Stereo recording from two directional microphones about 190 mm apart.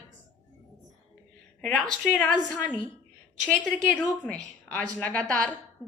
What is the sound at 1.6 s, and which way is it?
A woman's voice, 5° left (ahead or behind).